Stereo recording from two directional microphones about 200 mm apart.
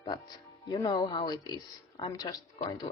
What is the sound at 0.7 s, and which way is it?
Speech, 20° left (ahead or behind).